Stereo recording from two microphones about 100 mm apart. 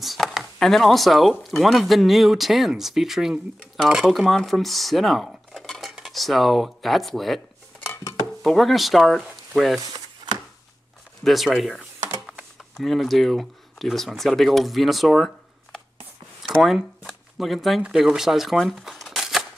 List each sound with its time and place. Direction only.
0.0 s a sound: centre (ahead or behind)
1.4 s speech: centre (ahead or behind)
9.8 s a sound: 45° right (ahead or behind)
11.2 s speech: centre (ahead or behind)
12.3 s typing: 10° right (ahead or behind)
12.8 s speech: centre (ahead or behind)